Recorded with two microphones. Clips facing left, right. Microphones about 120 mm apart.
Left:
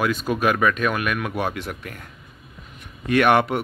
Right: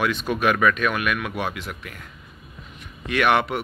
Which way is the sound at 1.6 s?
45° left (ahead or behind).